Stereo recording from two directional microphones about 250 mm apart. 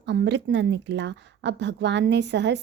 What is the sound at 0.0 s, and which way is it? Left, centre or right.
A woman's voice, right.